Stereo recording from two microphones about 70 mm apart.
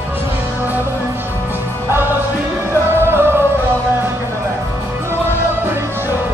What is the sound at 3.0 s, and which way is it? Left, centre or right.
Music, right.